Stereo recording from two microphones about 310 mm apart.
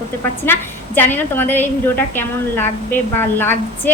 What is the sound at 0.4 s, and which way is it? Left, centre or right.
A woman's voice, centre.